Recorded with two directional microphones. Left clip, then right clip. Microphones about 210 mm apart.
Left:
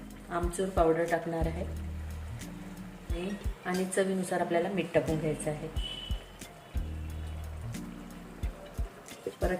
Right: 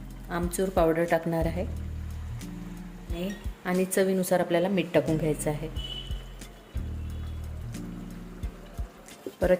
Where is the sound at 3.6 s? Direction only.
50° right (ahead or behind).